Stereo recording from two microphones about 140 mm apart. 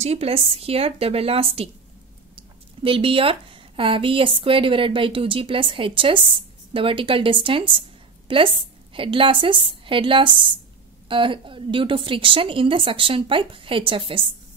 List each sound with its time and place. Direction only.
0.0 s a woman's voice: 50° right (ahead or behind)
2.8 s a woman's voice: 40° right (ahead or behind)